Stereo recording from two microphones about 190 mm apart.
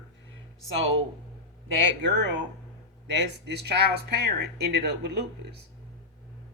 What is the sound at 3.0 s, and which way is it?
Speech, 65° right (ahead or behind).